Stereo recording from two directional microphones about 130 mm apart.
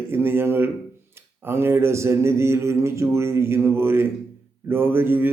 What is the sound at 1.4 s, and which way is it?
A man's voice, 20° right (ahead or behind).